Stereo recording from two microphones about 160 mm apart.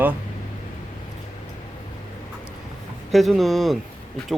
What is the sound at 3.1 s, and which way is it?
Speech, centre (ahead or behind).